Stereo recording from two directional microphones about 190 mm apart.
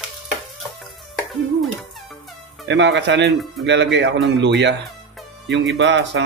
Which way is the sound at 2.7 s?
70° right (ahead or behind).